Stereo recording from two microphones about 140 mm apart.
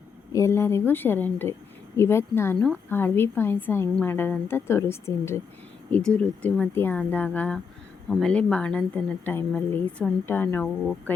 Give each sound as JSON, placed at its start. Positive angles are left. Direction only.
{"t": 0.3, "sound": "speech", "side_deg": 20}
{"t": 6.4, "sound": "speech", "side_deg": 10}